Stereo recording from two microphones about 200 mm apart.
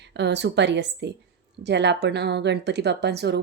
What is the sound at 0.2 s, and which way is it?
Speech, 60° right (ahead or behind).